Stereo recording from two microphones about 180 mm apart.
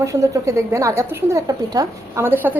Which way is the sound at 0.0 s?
15° right (ahead or behind).